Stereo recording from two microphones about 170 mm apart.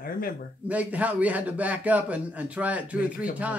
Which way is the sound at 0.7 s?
10° right (ahead or behind).